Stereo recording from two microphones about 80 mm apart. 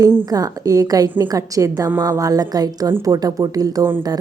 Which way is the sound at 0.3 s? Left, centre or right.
Right.